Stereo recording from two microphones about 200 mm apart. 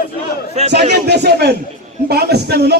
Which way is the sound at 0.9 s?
55° right (ahead or behind).